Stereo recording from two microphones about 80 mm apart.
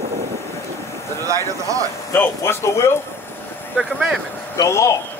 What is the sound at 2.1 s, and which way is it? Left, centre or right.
Speech, left.